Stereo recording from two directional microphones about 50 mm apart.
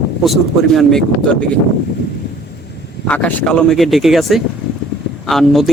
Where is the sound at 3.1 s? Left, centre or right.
Left.